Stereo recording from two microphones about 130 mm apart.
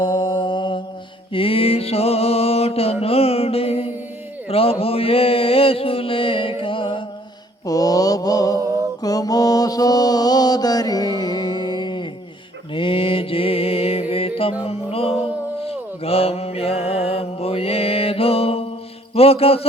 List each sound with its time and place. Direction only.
0.0 s mantra: 40° left (ahead or behind)
1.3 s music: 45° left (ahead or behind)
4.4 s mantra: 50° left (ahead or behind)
7.6 s mantra: 30° left (ahead or behind); by 14.0 s 50° left (ahead or behind)
14.1 s music: 45° left (ahead or behind)
15.6 s mantra: 50° left (ahead or behind)